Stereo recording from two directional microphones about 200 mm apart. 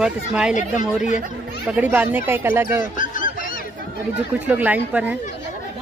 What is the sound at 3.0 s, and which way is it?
Honk, 40° left (ahead or behind).